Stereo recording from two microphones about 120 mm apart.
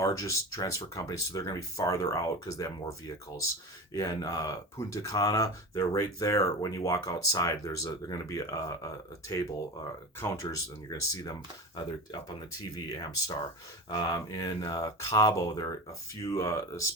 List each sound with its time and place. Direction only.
0.0 s speech: 25° left (ahead or behind)
3.9 s speech: 30° left (ahead or behind)
10.2 s speech: 25° left (ahead or behind)
12.4 s speech: 30° left (ahead or behind)